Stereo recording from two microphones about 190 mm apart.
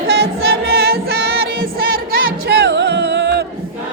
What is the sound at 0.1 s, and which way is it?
Music, 55° right (ahead or behind).